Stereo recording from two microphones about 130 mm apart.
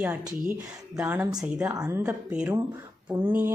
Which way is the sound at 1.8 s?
20° right (ahead or behind).